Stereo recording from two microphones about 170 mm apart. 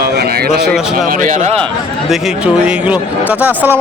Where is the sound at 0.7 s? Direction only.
55° right (ahead or behind).